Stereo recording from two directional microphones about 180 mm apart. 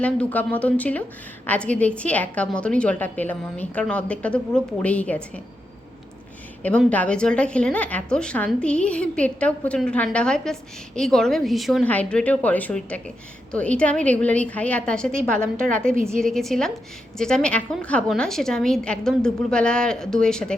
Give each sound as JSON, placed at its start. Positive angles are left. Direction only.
{"t": 0.0, "sound": "a woman's voice", "side_deg": 10}
{"t": 6.6, "sound": "a woman's voice", "side_deg": 10}